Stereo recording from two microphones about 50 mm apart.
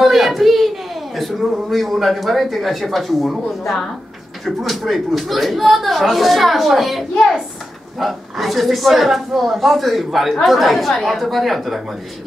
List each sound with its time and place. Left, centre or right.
0.0 s speech: centre